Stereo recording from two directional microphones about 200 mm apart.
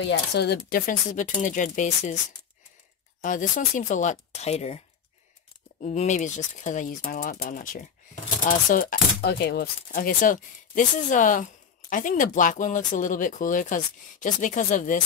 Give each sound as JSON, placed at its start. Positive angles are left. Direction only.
{"t": 0.1, "sound": "speech", "side_deg": 55}
{"t": 3.2, "sound": "speech", "side_deg": 40}